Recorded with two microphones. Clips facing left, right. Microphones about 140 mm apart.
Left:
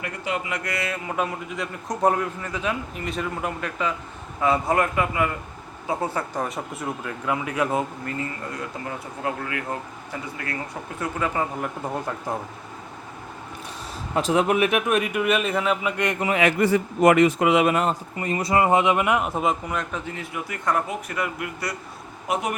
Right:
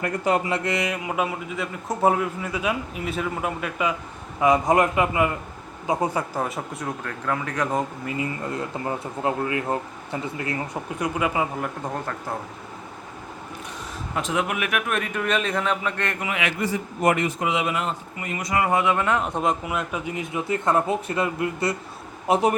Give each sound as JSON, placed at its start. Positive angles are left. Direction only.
{"t": 0.0, "sound": "speech", "side_deg": -40}
{"t": 0.6, "sound": "a man's voice", "side_deg": -20}
{"t": 6.3, "sound": "speech", "side_deg": 0}
{"t": 8.0, "sound": "speech", "side_deg": -10}
{"t": 8.5, "sound": "speech", "side_deg": -25}
{"t": 12.3, "sound": "speech", "side_deg": 15}
{"t": 14.2, "sound": "speech", "side_deg": 35}
{"t": 16.2, "sound": "a man's voice", "side_deg": 40}
{"t": 16.6, "sound": "speech", "side_deg": 65}